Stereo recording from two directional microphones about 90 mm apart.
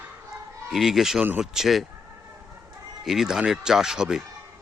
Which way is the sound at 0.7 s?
5° right (ahead or behind).